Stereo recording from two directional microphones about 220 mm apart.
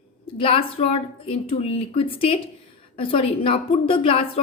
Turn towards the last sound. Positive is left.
turn(degrees=25)  # may be behind; listen again after turning